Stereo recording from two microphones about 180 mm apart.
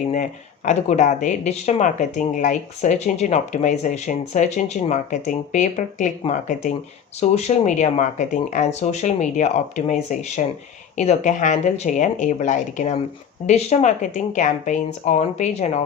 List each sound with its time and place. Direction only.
0.1 s speech: 45° left (ahead or behind)